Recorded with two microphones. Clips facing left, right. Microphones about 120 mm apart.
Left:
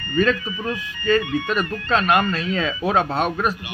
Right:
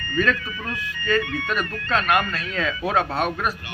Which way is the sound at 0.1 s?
20° left (ahead or behind).